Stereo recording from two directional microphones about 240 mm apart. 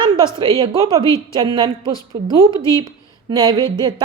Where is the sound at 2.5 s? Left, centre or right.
Centre.